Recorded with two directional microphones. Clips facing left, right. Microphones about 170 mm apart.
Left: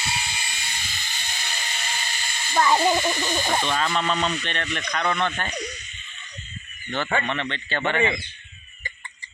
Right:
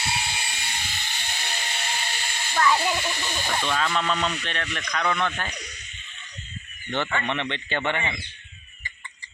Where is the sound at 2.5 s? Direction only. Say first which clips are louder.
Left 3 dB; 30° left (ahead or behind).